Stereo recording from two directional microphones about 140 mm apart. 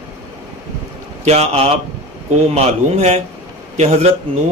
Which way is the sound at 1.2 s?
50° right (ahead or behind).